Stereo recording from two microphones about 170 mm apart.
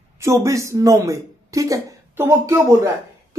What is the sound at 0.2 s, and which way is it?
A woman's voice, 15° right (ahead or behind).